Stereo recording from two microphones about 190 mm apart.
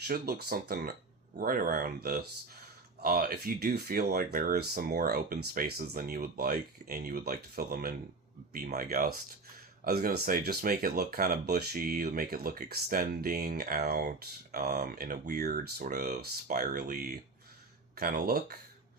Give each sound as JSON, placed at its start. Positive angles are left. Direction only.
{"t": 0.1, "sound": "speech", "side_deg": -55}